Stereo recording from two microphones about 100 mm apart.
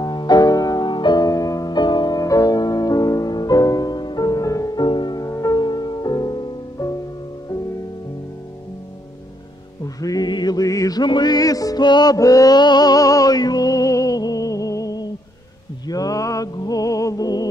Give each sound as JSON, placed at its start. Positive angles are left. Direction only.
{"t": 0.0, "sound": "music", "side_deg": 45}
{"t": 4.8, "sound": "music", "side_deg": 50}
{"t": 9.9, "sound": "music", "side_deg": 40}